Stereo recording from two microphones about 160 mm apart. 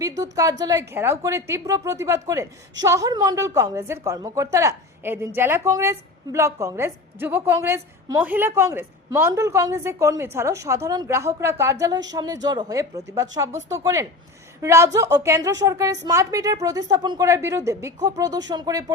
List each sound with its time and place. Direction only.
0.2 s a woman's voice: 20° right (ahead or behind)